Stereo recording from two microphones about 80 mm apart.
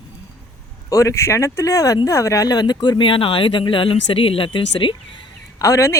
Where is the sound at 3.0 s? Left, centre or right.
Left.